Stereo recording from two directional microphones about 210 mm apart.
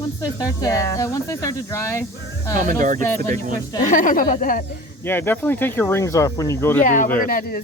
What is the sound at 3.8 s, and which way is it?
Speech, 40° left (ahead or behind).